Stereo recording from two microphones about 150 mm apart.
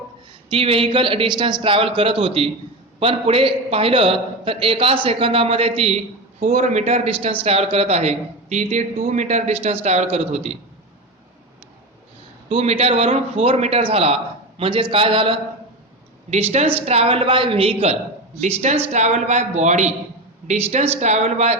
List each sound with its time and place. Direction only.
0.5 s a man's voice: 35° right (ahead or behind)
12.5 s a man's voice: 40° right (ahead or behind)
16.3 s a man's voice: 45° right (ahead or behind)
18.9 s a man's voice: 50° right (ahead or behind)